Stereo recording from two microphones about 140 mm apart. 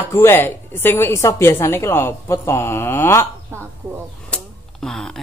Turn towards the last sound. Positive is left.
turn(degrees=5)  # may be behind; listen again after turning